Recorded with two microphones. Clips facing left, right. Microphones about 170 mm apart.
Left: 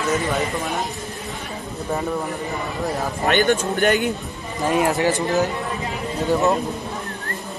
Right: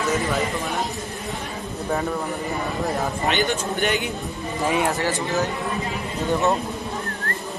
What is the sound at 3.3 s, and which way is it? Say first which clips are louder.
Speech: left 7 dB; 55° left (ahead or behind).